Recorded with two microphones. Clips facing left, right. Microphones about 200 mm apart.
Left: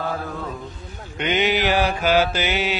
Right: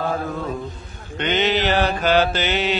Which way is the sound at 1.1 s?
10° left (ahead or behind).